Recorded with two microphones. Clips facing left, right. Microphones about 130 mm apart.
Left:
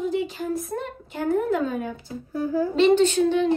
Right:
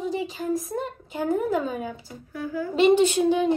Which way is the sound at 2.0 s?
35° left (ahead or behind).